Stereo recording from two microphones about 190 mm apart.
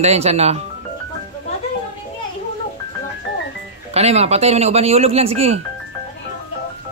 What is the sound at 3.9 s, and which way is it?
Speech, 35° right (ahead or behind).